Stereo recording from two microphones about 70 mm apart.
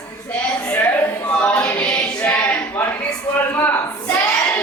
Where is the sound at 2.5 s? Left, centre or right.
Left.